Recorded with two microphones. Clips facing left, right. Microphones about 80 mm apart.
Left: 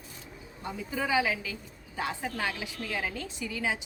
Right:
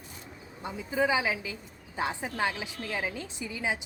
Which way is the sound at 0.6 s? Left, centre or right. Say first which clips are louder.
Right 4 dB; centre.